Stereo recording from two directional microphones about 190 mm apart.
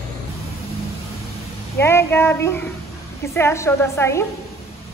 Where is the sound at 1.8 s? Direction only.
10° left (ahead or behind).